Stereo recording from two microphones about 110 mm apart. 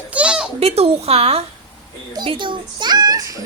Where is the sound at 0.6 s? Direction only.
70° right (ahead or behind).